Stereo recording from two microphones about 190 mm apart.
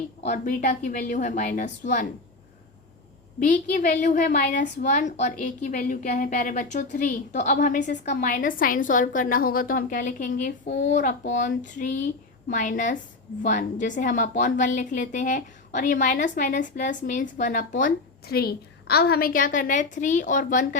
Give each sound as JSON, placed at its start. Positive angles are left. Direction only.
{"t": 0.2, "sound": "a woman's voice", "side_deg": 45}
{"t": 3.4, "sound": "a woman's voice", "side_deg": 45}